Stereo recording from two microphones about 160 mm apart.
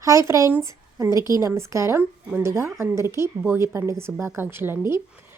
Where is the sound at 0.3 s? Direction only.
20° right (ahead or behind).